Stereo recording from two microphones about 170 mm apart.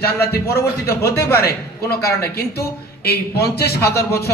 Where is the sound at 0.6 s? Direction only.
65° left (ahead or behind).